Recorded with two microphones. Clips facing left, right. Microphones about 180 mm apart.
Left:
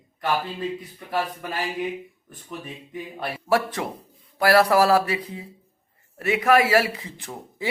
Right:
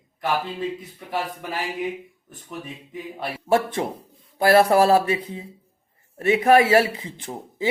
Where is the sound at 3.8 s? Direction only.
30° right (ahead or behind).